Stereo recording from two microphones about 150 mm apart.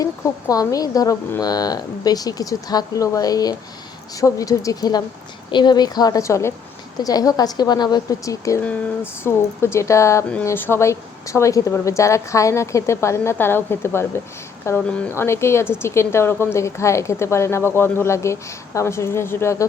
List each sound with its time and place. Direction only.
0.0 s speech: 25° left (ahead or behind)